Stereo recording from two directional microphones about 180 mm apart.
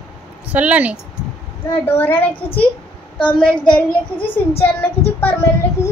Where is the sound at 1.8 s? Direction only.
10° left (ahead or behind).